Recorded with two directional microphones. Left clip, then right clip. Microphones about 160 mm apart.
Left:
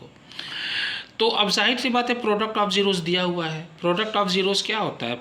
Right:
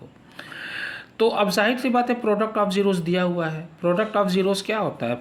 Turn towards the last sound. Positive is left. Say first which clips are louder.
# right 1 dB
turn(degrees=-45)  # may be behind; listen again after turning